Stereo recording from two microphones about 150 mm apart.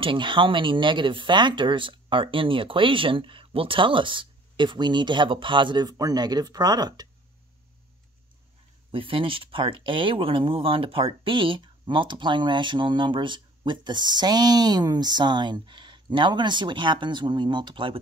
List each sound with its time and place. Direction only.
0.0 s speech: 35° right (ahead or behind)
8.9 s speech: 35° right (ahead or behind)